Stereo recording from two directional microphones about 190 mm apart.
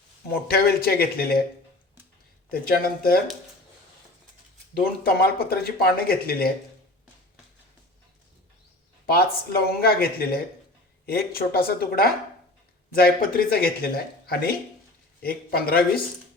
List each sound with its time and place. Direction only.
0.3 s speech: 55° left (ahead or behind)
2.5 s speech: 50° left (ahead or behind)
4.7 s speech: 50° left (ahead or behind)
9.0 s speech: 55° left (ahead or behind)